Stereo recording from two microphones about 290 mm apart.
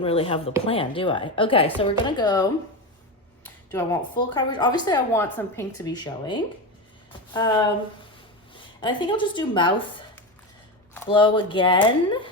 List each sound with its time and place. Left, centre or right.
0.0 s speech: centre
8.8 s speech: centre